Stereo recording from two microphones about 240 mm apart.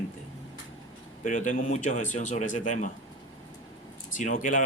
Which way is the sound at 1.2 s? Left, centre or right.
Left.